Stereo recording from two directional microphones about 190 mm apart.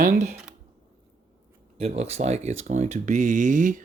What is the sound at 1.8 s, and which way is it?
Speech, 35° right (ahead or behind).